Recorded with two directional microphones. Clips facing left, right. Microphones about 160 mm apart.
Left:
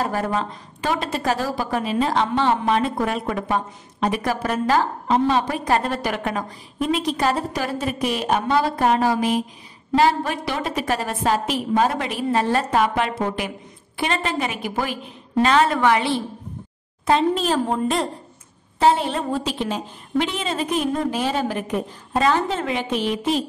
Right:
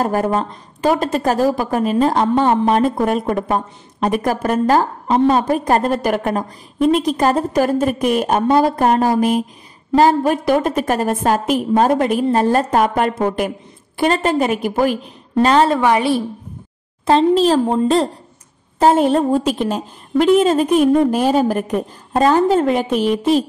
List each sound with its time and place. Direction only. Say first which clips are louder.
0.0 s speech: right 6 dB; 45° right (ahead or behind)
15.4 s a woman's voice: right 5 dB; 35° right (ahead or behind)
17.0 s a woman's voice: right 6 dB; 30° right (ahead or behind)
18.8 s speech: right 6 dB; 45° right (ahead or behind)